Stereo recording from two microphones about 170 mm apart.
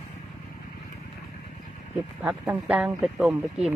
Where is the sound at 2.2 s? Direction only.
10° right (ahead or behind).